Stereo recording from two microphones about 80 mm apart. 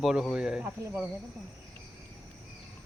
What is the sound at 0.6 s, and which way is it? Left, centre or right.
Speech, right.